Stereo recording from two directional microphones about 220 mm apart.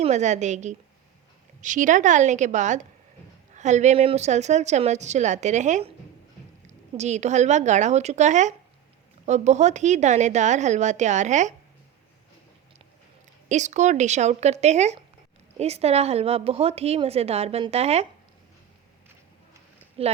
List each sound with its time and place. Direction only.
0.0 s a woman's voice: 30° right (ahead or behind)
13.5 s a woman's voice: 35° right (ahead or behind)
20.0 s speech: 25° right (ahead or behind)